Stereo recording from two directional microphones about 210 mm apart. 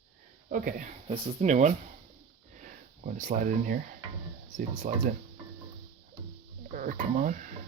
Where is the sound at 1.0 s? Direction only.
25° right (ahead or behind).